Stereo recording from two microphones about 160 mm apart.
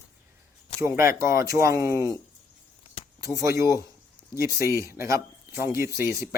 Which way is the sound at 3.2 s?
20° right (ahead or behind).